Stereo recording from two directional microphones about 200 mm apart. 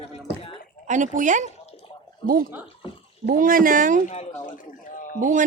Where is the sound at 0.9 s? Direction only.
40° right (ahead or behind).